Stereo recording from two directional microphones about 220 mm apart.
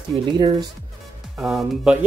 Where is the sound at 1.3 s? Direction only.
Centre (ahead or behind).